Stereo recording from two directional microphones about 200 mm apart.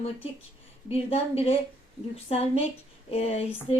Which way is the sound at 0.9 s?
30° left (ahead or behind).